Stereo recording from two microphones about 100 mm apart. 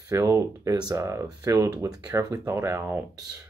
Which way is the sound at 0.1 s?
35° right (ahead or behind).